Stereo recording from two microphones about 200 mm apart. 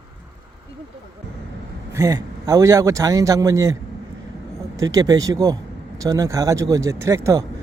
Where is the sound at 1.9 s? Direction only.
15° right (ahead or behind).